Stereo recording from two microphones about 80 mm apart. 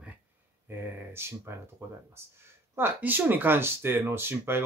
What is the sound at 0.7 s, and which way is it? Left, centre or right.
Speech, right.